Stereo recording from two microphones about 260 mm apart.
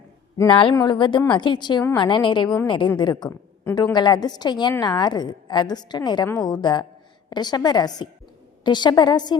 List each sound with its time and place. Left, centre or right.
0.3 s a woman's voice: centre